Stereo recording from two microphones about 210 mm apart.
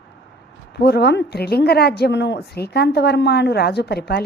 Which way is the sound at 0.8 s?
50° left (ahead or behind).